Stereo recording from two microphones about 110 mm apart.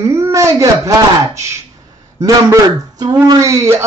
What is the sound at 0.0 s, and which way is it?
Speech, 25° right (ahead or behind).